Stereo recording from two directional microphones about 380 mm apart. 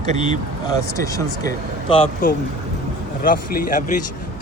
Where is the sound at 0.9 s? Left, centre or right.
Centre.